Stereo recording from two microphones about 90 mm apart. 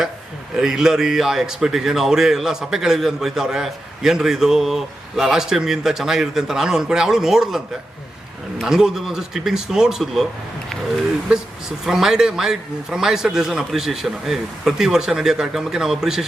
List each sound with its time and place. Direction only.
0.5 s speech: 5° right (ahead or behind)
8.6 s speech: 5° right (ahead or behind)
11.9 s speech: 5° right (ahead or behind)